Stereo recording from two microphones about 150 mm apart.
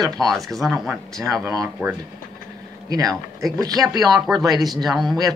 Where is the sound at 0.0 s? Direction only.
Centre (ahead or behind).